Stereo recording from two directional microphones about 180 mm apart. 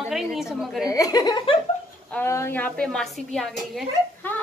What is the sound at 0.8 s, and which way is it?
Speech, 20° left (ahead or behind).